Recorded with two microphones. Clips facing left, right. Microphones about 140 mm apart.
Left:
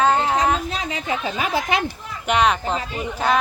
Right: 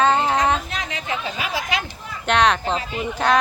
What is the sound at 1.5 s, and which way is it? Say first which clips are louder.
Speech: left 4 dB; 55° left (ahead or behind).